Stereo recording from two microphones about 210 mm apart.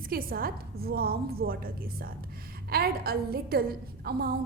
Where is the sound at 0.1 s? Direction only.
45° right (ahead or behind).